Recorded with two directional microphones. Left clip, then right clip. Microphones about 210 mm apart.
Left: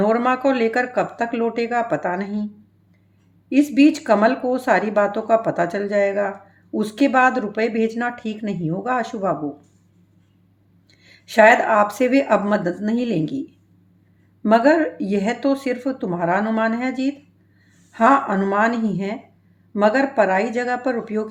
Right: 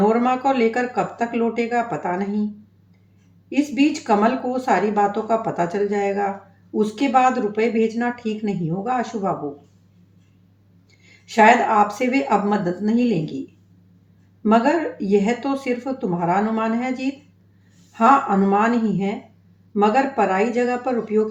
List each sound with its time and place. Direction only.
0.0 s a woman's voice: 55° left (ahead or behind)
3.5 s a woman's voice: 55° left (ahead or behind)
11.0 s a woman's voice: 55° left (ahead or behind)
14.4 s a woman's voice: 50° left (ahead or behind)